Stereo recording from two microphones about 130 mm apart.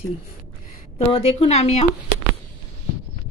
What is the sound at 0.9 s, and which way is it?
Speech, 50° left (ahead or behind).